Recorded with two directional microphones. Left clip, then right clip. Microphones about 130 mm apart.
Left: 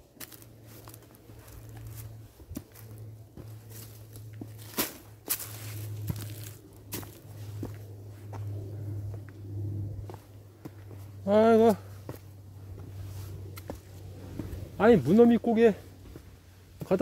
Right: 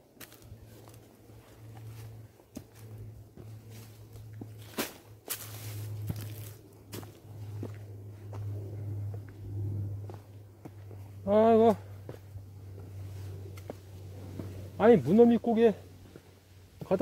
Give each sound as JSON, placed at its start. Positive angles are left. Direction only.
{"t": 4.6, "sound": "walk", "side_deg": 45}
{"t": 7.6, "sound": "walk", "side_deg": 30}
{"t": 11.2, "sound": "speech", "side_deg": 15}
{"t": 14.8, "sound": "speech", "side_deg": 5}